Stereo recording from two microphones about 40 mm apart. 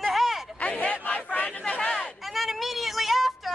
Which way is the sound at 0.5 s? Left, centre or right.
Left.